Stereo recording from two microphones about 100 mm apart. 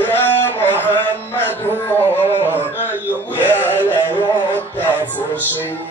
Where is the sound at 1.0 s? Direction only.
20° left (ahead or behind).